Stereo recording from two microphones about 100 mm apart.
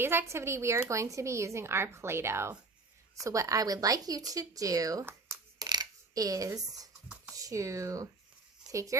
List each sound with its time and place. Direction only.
0.0 s a woman's voice: 25° right (ahead or behind)
5.5 s a sound: 45° right (ahead or behind)
7.3 s speech: 35° right (ahead or behind)